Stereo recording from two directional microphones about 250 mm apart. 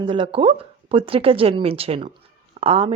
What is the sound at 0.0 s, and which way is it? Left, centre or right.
Speech, centre.